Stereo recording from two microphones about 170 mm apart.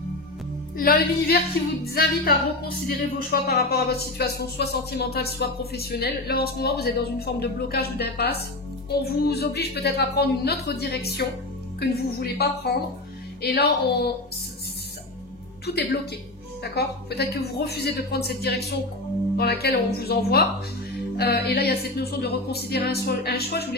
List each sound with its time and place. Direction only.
0.7 s speech: 60° left (ahead or behind)
15.6 s a woman's voice: 70° left (ahead or behind)